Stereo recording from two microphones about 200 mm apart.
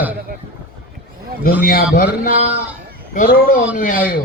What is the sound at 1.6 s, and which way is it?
Speech, 45° left (ahead or behind).